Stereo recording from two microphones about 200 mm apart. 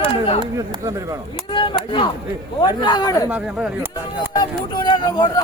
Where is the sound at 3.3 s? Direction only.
5° right (ahead or behind).